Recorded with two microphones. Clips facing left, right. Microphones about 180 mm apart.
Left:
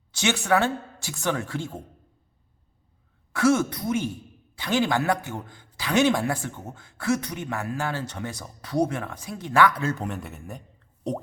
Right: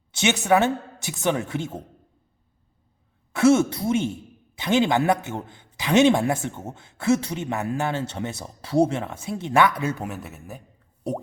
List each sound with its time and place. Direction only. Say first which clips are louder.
0.2 s speech: right 3 dB; 20° right (ahead or behind)
3.3 s speech: right 4 dB; 25° right (ahead or behind); by 10.6 s centre (ahead or behind)